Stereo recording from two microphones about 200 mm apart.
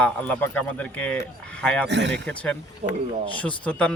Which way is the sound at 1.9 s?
60° right (ahead or behind).